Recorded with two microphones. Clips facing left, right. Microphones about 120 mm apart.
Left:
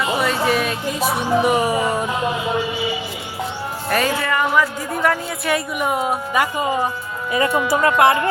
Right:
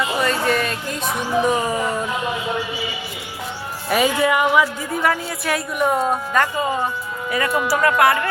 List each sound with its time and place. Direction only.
0.2 s speech: 5° left (ahead or behind)
3.8 s speech: 10° right (ahead or behind); by 6.5 s 10° left (ahead or behind)
7.3 s speech: 25° left (ahead or behind)